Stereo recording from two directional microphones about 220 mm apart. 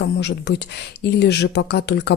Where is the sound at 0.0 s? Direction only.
50° left (ahead or behind).